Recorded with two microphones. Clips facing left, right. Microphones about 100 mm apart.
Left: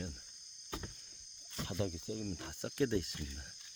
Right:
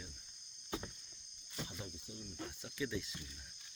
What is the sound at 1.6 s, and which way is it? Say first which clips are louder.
Speech: left 9 dB; 85° left.